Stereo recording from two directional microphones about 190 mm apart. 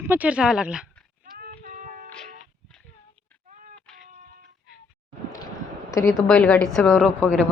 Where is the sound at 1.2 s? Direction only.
45° right (ahead or behind).